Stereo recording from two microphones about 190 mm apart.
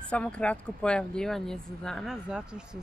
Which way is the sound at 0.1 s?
5° left (ahead or behind).